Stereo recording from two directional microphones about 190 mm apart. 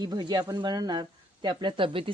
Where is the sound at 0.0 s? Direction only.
20° right (ahead or behind).